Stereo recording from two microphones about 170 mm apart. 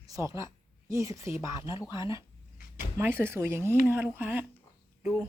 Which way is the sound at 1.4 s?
25° left (ahead or behind).